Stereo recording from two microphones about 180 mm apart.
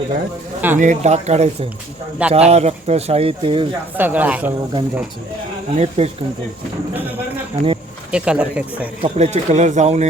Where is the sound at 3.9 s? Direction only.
10° right (ahead or behind).